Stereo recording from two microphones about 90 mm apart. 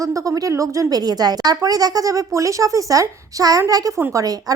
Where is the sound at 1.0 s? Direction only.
50° right (ahead or behind).